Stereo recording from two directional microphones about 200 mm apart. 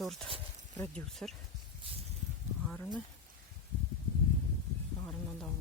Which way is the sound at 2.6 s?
5° left (ahead or behind).